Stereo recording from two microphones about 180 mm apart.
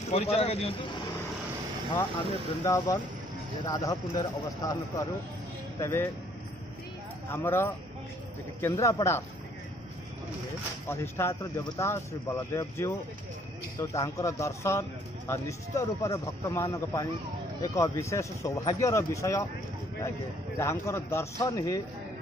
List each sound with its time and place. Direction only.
0.1 s speech: 35° left (ahead or behind)
2.6 s a man's voice: 20° left (ahead or behind)
7.2 s speech: 15° left (ahead or behind)
10.9 s speech: 15° left (ahead or behind)
20.5 s speech: 15° left (ahead or behind)